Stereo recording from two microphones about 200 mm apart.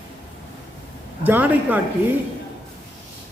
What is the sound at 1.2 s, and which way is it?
Speech, 10° right (ahead or behind).